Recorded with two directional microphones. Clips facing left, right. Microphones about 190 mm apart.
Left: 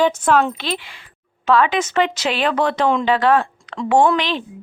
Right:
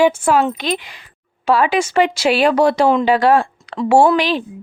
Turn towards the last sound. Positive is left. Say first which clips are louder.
# right 3 dB
turn(degrees=-10)  # may be behind; listen again after turning